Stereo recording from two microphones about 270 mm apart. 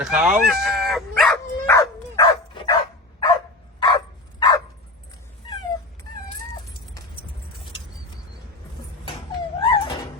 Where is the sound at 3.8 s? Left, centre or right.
Centre.